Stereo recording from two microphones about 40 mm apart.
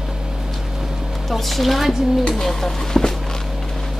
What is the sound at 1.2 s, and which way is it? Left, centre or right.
A woman's voice, centre.